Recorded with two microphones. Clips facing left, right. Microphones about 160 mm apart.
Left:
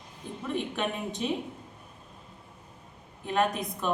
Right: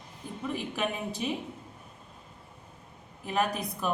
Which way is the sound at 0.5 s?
5° right (ahead or behind).